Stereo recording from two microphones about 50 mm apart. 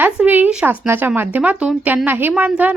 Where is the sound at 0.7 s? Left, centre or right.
Right.